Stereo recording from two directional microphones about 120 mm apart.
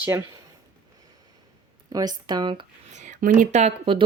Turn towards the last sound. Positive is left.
turn(degrees=-70)  # may be behind; listen again after turning